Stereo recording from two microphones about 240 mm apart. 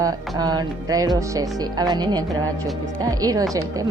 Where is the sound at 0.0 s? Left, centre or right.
Centre.